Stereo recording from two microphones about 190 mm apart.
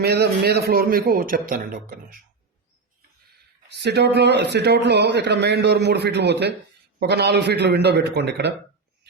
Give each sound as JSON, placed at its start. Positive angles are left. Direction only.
{"t": 0.0, "sound": "a man's voice", "side_deg": -55}
{"t": 3.7, "sound": "speech", "side_deg": -65}